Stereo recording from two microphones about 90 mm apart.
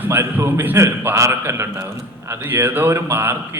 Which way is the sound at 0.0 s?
25° right (ahead or behind).